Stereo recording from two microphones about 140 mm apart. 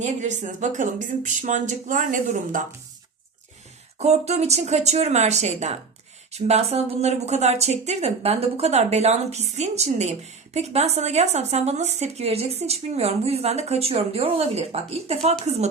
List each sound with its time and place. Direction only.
0.0 s speech: 60° right (ahead or behind)
3.9 s speech: 50° right (ahead or behind)